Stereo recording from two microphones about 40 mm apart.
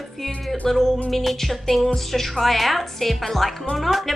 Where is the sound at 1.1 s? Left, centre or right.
Centre.